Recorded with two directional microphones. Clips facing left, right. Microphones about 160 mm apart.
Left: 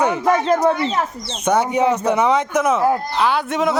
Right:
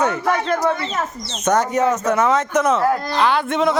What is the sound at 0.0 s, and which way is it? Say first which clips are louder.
Speech: left 2 dB; 15° left (ahead or behind).